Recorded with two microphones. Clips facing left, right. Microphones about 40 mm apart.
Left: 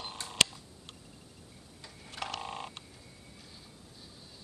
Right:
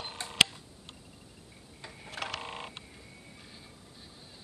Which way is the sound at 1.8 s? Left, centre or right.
Right.